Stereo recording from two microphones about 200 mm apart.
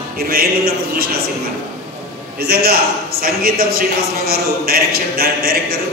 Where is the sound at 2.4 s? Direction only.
50° right (ahead or behind).